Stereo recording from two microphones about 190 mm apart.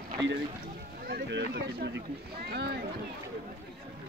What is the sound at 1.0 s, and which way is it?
Speech, 60° right (ahead or behind).